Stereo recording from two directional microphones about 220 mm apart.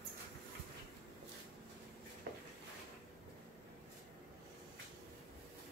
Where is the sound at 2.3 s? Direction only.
45° right (ahead or behind).